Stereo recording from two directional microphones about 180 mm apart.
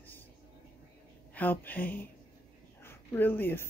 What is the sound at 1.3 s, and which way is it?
Speech, 10° left (ahead or behind).